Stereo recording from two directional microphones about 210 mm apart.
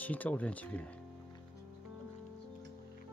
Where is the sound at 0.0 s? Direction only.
5° left (ahead or behind).